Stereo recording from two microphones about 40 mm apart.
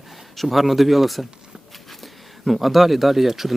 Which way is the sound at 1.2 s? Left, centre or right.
Centre.